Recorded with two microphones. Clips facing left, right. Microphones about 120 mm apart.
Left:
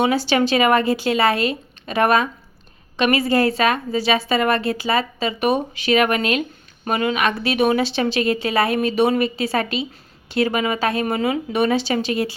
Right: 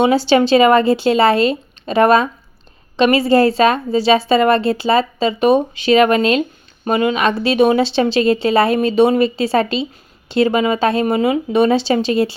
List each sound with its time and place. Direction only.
0.0 s a woman's voice: 30° right (ahead or behind)